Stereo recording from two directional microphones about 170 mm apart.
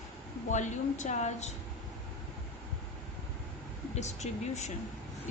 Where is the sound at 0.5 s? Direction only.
45° left (ahead or behind).